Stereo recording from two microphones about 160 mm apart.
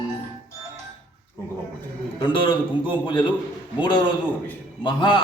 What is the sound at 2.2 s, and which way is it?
A man's voice, 30° left (ahead or behind).